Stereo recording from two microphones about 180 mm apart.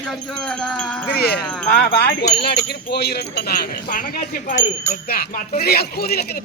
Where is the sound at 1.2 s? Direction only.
60° left (ahead or behind).